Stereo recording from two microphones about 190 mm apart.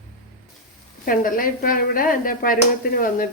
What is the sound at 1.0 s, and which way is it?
Speech, 45° left (ahead or behind).